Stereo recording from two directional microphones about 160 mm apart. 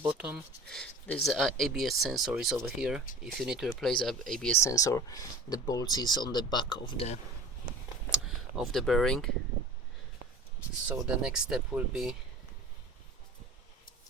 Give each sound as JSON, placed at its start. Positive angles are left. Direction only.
{"t": 0.1, "sound": "speech", "side_deg": -5}
{"t": 0.7, "sound": "speech", "side_deg": 5}
{"t": 4.6, "sound": "speech", "side_deg": 20}
{"t": 8.1, "sound": "speech", "side_deg": 0}
{"t": 10.8, "sound": "speech", "side_deg": -5}